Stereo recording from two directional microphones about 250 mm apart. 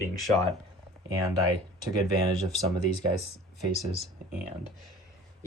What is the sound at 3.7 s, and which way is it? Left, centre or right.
Speech, left.